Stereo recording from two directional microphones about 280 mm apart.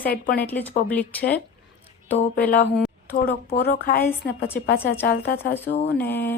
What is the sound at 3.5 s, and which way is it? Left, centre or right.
Speech, left.